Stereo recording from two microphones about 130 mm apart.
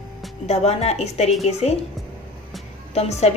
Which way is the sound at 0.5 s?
55° left (ahead or behind).